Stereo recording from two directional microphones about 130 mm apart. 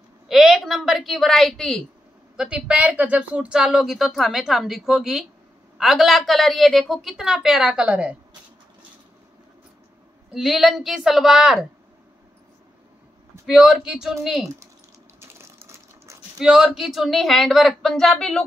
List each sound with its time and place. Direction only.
0.3 s a woman's voice: 5° right (ahead or behind)
10.3 s speech: centre (ahead or behind)
13.5 s speech: 5° right (ahead or behind)
15.1 s water: 20° right (ahead or behind)
16.3 s speech: 5° right (ahead or behind)